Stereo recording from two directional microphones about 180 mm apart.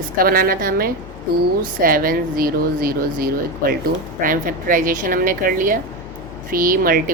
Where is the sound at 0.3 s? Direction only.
55° right (ahead or behind).